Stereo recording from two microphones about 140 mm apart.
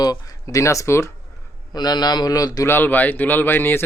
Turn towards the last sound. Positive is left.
turn(degrees=15)  # may be behind; listen again after turning